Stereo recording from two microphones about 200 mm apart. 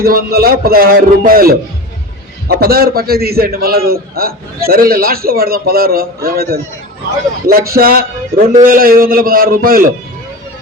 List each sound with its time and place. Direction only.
0.0 s a man's voice: 50° right (ahead or behind)
2.6 s a man's voice: 50° right (ahead or behind)